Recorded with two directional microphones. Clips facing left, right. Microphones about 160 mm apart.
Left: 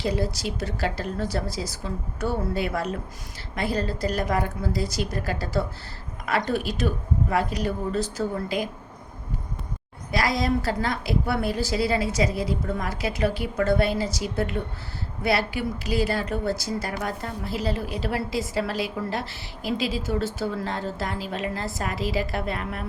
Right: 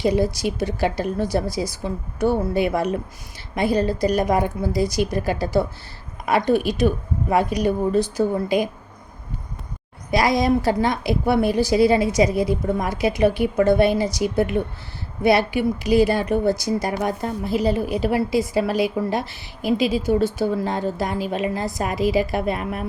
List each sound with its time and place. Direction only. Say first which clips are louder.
0.0 s a woman's voice: right 7 dB; 15° right (ahead or behind)
10.1 s a woman's voice: right 6 dB; 15° right (ahead or behind)